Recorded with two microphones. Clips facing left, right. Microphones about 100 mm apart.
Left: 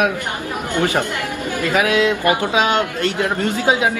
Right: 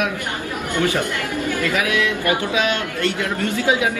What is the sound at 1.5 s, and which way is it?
A man's voice, 20° left (ahead or behind).